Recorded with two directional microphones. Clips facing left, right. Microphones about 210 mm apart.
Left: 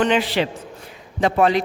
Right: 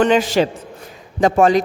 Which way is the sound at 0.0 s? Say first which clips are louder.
Right 4 dB; 45° right (ahead or behind).